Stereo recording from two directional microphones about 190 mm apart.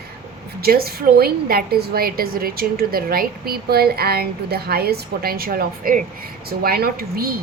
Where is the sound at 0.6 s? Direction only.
55° right (ahead or behind).